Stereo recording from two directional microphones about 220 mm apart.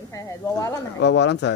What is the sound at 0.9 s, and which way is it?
Speech, 50° left (ahead or behind).